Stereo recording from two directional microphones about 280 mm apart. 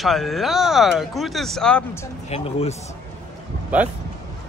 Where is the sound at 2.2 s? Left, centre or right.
Left.